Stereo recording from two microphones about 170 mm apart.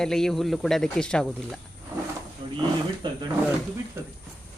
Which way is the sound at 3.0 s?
25° right (ahead or behind).